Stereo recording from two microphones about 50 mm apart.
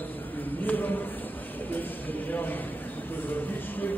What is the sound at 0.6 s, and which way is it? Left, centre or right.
A man's voice, left.